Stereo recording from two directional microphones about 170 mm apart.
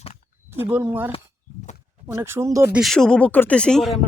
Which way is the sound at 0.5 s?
10° right (ahead or behind).